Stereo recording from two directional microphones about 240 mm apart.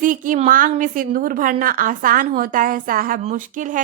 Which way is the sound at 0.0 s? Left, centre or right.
Right.